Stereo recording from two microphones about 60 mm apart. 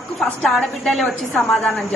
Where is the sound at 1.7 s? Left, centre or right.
Left.